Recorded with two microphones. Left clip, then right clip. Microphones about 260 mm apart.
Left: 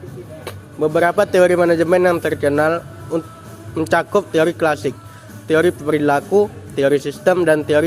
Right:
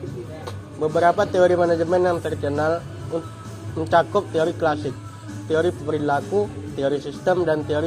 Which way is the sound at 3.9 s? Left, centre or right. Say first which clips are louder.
Left 2 dB; left.